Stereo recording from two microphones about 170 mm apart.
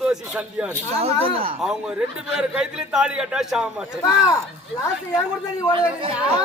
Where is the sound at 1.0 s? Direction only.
35° right (ahead or behind).